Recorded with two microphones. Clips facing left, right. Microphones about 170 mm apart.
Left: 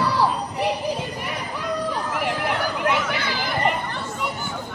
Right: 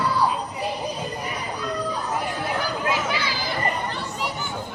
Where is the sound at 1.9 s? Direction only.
90° left; by 3.8 s 70° left (ahead or behind).